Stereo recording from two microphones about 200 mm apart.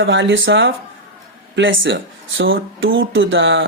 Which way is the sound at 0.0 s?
70° right (ahead or behind).